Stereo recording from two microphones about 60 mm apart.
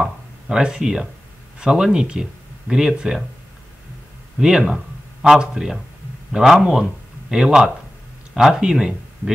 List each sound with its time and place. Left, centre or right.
0.0 s a sound: centre
1.6 s speech: centre
4.4 s speech: centre